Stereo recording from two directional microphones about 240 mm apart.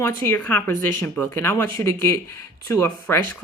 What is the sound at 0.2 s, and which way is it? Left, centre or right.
Speech, centre.